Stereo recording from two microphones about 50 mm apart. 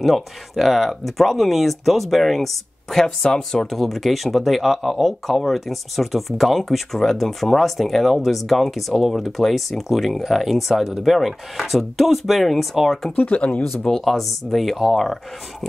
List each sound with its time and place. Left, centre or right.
0.0 s speech: centre
13.1 s speech: left
13.8 s speech: centre